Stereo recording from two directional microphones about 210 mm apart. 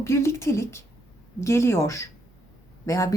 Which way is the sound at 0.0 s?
10° left (ahead or behind).